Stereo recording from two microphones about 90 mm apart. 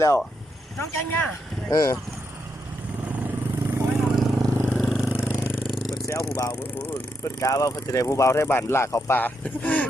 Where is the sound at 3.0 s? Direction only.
20° right (ahead or behind).